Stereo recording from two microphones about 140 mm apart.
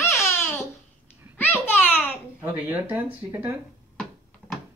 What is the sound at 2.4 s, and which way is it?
Speech, 15° right (ahead or behind).